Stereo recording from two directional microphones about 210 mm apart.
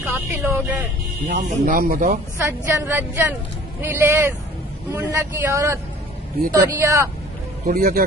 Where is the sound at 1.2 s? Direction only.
40° right (ahead or behind).